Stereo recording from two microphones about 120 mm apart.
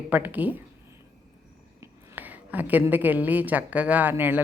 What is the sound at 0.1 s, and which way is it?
Speech, 15° right (ahead or behind).